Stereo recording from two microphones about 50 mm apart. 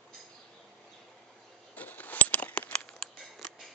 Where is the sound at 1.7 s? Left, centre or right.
Left.